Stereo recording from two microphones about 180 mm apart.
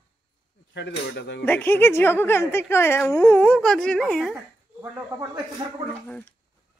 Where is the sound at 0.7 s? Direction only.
75° left (ahead or behind).